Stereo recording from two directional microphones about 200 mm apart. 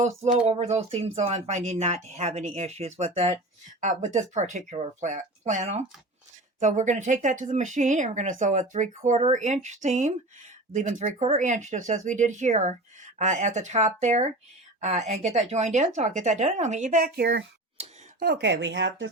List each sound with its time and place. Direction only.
0.0 s speech: 30° right (ahead or behind); by 19.1 s 60° right (ahead or behind)